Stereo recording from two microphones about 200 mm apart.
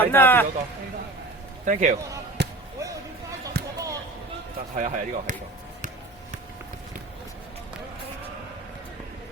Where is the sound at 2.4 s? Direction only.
60° right (ahead or behind).